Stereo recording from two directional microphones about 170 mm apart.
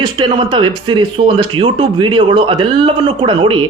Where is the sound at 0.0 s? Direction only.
25° right (ahead or behind).